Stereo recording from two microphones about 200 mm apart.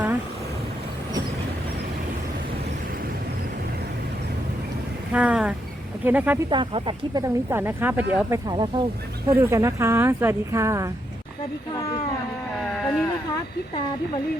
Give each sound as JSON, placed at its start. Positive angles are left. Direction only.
{"t": 5.1, "sound": "vehicle", "side_deg": -5}
{"t": 6.1, "sound": "speech", "side_deg": -10}
{"t": 6.5, "sound": "speech", "side_deg": -25}
{"t": 8.4, "sound": "speech", "side_deg": -25}
{"t": 12.5, "sound": "a sound", "side_deg": 5}